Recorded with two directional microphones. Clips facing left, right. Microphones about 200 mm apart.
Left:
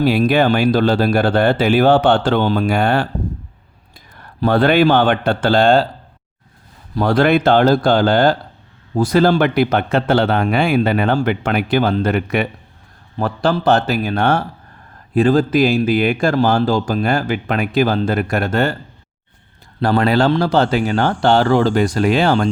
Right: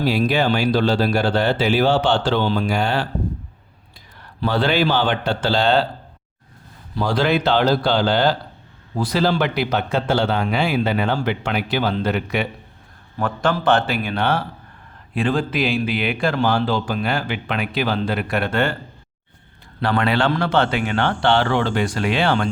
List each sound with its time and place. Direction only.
0.0 s speech: 55° left (ahead or behind)
4.2 s a man's voice: 50° left (ahead or behind)
6.9 s a man's voice: 55° left (ahead or behind)
13.1 s a man's voice: 35° left (ahead or behind)
19.8 s a man's voice: 40° left (ahead or behind)